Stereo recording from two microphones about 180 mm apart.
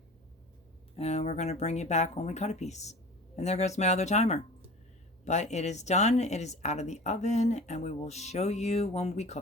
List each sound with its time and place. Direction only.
0.9 s speech: 35° left (ahead or behind)